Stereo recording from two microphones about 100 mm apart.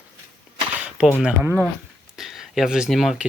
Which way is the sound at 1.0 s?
10° right (ahead or behind).